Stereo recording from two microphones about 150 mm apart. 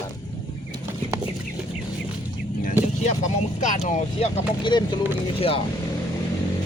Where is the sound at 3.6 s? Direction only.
55° left (ahead or behind).